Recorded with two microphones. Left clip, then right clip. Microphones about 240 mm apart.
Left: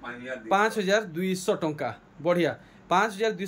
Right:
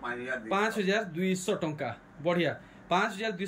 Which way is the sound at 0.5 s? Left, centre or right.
Centre.